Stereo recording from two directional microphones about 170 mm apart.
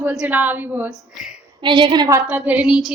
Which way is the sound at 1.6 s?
30° right (ahead or behind).